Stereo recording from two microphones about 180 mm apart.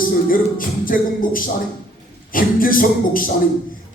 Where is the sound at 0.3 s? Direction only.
50° left (ahead or behind).